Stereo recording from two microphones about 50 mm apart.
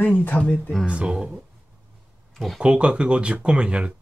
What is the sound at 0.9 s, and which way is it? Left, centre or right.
Speech, right.